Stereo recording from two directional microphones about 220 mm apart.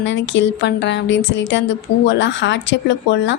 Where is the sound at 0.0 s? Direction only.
55° left (ahead or behind).